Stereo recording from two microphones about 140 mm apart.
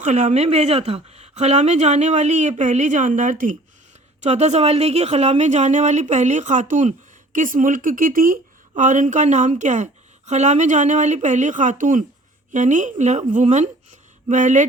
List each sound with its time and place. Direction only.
0.0 s speech: 55° right (ahead or behind)
4.2 s speech: 55° right (ahead or behind)